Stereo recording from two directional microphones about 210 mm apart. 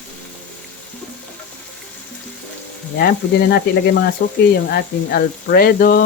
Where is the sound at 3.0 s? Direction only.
50° left (ahead or behind).